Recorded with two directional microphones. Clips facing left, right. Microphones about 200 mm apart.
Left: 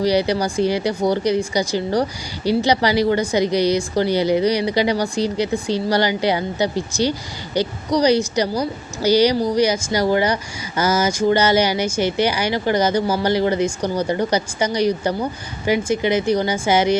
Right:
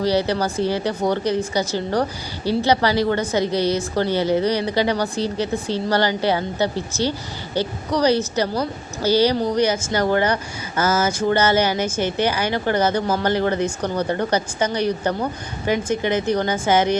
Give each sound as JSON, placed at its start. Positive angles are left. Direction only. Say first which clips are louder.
{"t": 0.0, "sound": "a woman's voice", "louder": "left 2 dB", "side_deg": 15}